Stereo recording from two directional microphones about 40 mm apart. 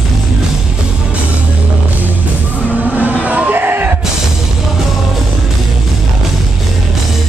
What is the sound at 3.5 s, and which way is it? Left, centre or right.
Music, right.